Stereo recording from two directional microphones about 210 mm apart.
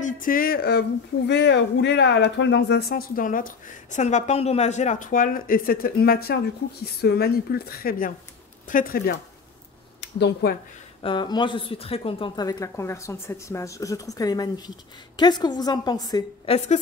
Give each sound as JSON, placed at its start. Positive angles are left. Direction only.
{"t": 0.0, "sound": "speech", "side_deg": 40}
{"t": 9.9, "sound": "speech", "side_deg": 55}
{"t": 11.0, "sound": "a woman's voice", "side_deg": 25}
{"t": 16.5, "sound": "a woman's voice", "side_deg": 35}